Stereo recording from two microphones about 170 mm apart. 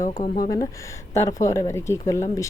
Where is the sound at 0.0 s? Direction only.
50° left (ahead or behind).